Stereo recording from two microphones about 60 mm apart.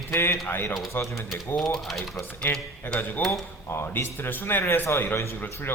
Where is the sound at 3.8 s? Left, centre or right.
Left.